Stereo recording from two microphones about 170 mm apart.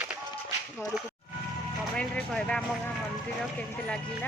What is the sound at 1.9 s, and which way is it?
Vehicle, 5° left (ahead or behind).